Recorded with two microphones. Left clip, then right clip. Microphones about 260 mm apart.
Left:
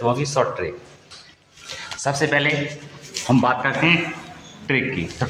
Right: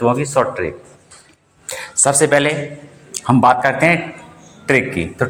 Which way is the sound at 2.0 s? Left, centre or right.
Right.